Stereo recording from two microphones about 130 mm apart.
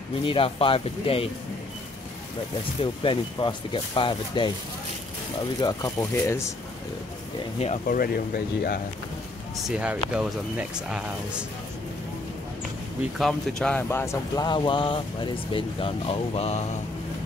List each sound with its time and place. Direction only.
0.2 s speech: 45° left (ahead or behind)
2.8 s speech: 40° left (ahead or behind)
5.6 s speech: 30° left (ahead or behind)
7.5 s speech: 50° left (ahead or behind)
7.9 s speech: 90° left
9.7 s speech: 10° right (ahead or behind)
13.2 s speech: 5° left (ahead or behind)
13.8 s speech: 20° left (ahead or behind); by 16.6 s 50° left (ahead or behind)